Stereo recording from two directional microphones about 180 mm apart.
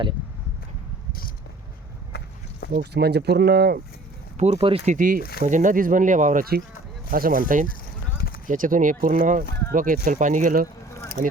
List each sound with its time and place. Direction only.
2.1 s a sound: 65° left (ahead or behind)
2.7 s speech: 65° right (ahead or behind)
4.4 s speech: 35° right (ahead or behind)
4.9 s speech: 50° right (ahead or behind)